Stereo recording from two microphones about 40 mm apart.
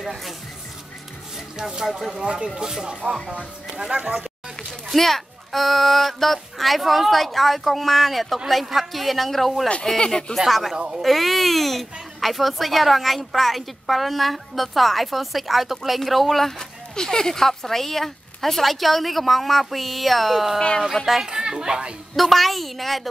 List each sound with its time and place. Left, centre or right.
1.6 s speech: centre
4.9 s speech: centre
9.9 s speech: left
10.3 s speech: centre
21.3 s speech: centre
22.1 s speech: centre